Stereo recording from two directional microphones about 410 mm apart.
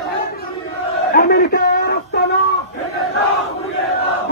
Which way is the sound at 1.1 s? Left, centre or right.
Left.